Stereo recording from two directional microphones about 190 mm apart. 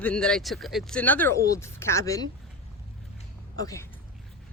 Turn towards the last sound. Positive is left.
turn(degrees=15)  # may be behind; listen again after turning